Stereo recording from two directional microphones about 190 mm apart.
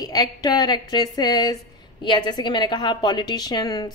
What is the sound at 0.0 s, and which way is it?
A woman's voice, 20° left (ahead or behind).